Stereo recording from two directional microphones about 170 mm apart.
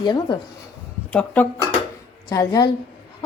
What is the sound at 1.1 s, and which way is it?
Speech, 10° left (ahead or behind).